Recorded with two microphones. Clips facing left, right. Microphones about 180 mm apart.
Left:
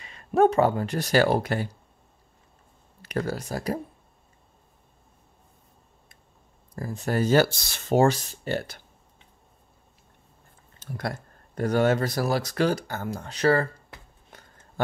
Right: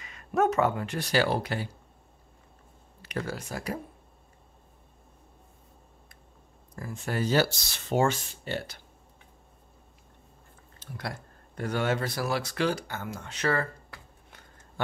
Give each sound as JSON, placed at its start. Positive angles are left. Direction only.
{"t": 0.0, "sound": "speech", "side_deg": 30}
{"t": 3.0, "sound": "speech", "side_deg": 40}
{"t": 6.7, "sound": "speech", "side_deg": 35}
{"t": 10.8, "sound": "speech", "side_deg": 45}
{"t": 13.9, "sound": "a sound", "side_deg": 20}
{"t": 14.3, "sound": "a sound", "side_deg": 40}